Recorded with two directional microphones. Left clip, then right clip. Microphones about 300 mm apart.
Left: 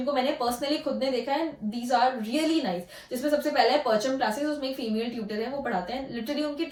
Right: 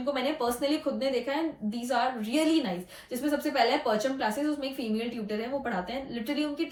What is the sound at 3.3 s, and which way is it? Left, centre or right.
Speech, centre.